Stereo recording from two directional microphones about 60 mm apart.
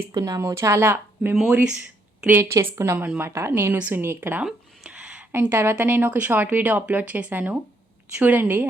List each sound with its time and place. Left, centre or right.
0.1 s speech: right
1.8 s a sound: right
2.4 s speech: right
3.7 s speech: right
4.4 s a sound: centre
5.3 s speech: right